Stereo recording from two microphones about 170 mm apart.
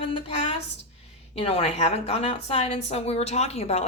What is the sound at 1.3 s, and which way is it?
A woman's voice, 35° left (ahead or behind).